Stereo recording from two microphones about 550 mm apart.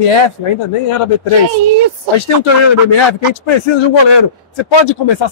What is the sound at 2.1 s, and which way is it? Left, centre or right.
A man's voice, left.